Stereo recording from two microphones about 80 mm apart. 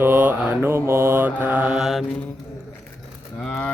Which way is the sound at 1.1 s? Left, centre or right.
Right.